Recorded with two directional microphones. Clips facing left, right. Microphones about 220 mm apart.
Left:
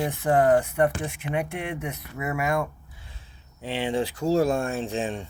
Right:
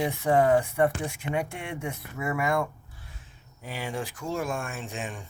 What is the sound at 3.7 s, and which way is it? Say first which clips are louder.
Speech: left 7 dB; 30° left (ahead or behind).